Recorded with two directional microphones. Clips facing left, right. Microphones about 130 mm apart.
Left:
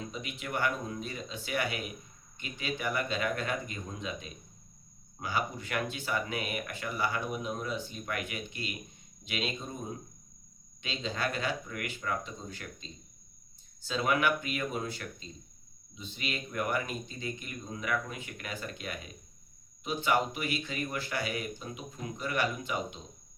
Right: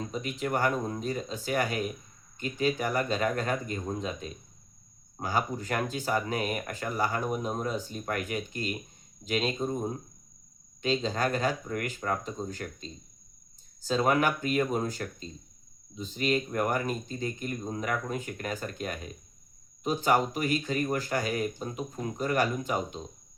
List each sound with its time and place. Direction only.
0.0 s speech: 40° right (ahead or behind)